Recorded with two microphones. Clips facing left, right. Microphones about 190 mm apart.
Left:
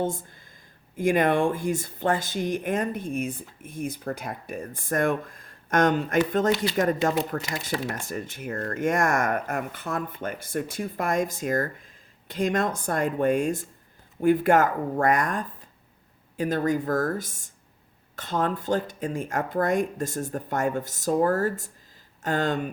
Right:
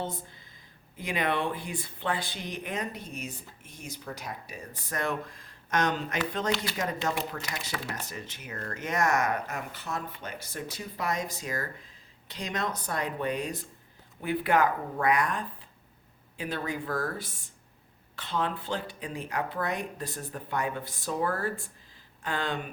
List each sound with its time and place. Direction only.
0.0 s speech: 50° left (ahead or behind)